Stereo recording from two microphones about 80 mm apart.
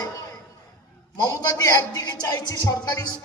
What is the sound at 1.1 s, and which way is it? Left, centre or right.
A man's voice, left.